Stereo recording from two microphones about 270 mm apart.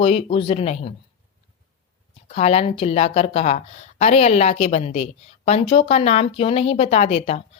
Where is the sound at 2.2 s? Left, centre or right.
Left.